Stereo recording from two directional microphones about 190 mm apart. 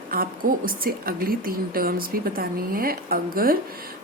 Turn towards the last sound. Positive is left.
turn(degrees=-50)  # may be behind; listen again after turning